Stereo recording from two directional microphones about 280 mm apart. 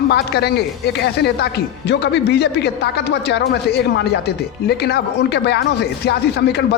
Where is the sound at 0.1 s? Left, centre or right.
Left.